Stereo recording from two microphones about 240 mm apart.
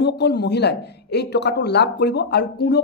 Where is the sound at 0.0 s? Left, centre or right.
Left.